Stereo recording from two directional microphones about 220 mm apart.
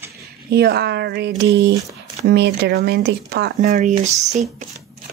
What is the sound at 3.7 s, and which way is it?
Speech, 35° right (ahead or behind).